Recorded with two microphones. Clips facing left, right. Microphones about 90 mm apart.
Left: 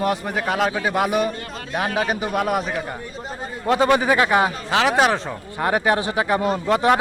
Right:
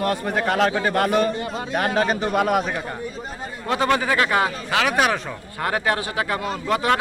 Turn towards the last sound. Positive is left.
turn(degrees=20)  # may be behind; listen again after turning